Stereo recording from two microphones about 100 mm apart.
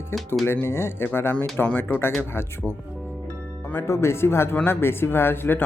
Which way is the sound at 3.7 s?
25° left (ahead or behind).